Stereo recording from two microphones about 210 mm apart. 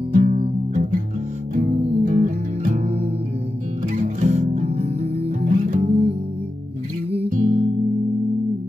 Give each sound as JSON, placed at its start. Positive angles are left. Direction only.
{"t": 0.1, "sound": "music", "side_deg": -45}
{"t": 1.5, "sound": "music", "side_deg": -35}